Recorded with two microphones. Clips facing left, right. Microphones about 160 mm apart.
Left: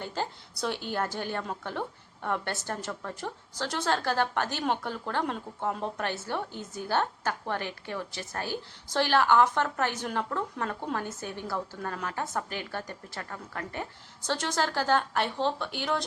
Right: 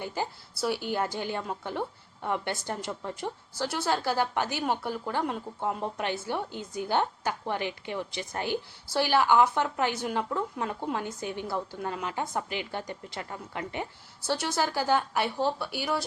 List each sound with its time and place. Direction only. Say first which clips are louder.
0.0 s a woman's voice: right 1 dB; 10° right (ahead or behind)